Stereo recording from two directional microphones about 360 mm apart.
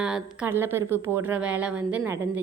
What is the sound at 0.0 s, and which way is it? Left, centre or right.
A woman's voice, centre.